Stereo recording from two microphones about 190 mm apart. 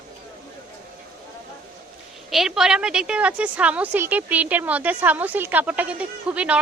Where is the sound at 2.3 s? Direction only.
Centre (ahead or behind).